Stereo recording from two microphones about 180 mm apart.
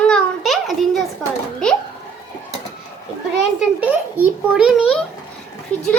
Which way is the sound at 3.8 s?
10° right (ahead or behind).